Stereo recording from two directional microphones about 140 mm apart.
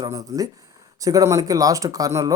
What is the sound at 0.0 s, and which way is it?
Speech, 25° right (ahead or behind).